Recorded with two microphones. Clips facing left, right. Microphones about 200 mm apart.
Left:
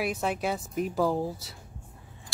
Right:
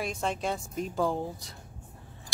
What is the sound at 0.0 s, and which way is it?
Speech, 5° left (ahead or behind).